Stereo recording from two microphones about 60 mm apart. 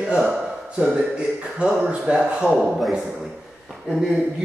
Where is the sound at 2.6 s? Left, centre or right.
Centre.